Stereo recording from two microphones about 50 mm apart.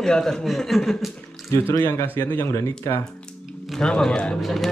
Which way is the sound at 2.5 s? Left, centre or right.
Left.